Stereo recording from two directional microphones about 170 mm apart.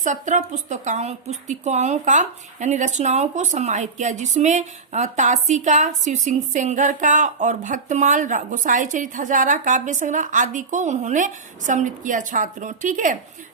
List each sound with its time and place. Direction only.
0.0 s a woman's voice: 45° right (ahead or behind)